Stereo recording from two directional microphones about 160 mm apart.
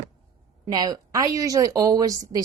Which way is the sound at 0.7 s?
25° right (ahead or behind).